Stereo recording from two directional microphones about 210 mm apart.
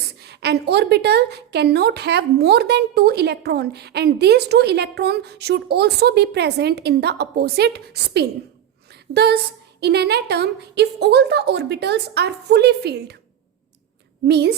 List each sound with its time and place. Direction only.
0.2 s a woman's voice: 50° right (ahead or behind)
14.3 s a woman's voice: 50° right (ahead or behind)